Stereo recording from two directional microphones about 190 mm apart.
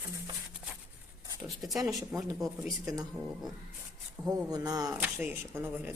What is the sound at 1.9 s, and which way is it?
Speech, 20° right (ahead or behind).